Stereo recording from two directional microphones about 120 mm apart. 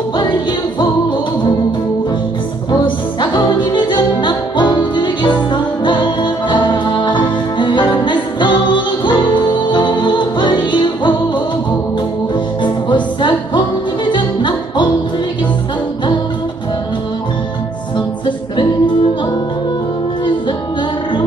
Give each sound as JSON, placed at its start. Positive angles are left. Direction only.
{"t": 2.7, "sound": "music", "side_deg": 35}
{"t": 12.6, "sound": "music", "side_deg": 40}